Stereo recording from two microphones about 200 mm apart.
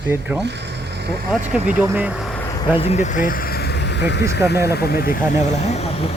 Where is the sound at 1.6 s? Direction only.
10° right (ahead or behind).